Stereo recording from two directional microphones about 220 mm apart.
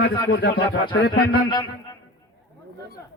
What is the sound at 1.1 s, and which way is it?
Speech, 20° left (ahead or behind).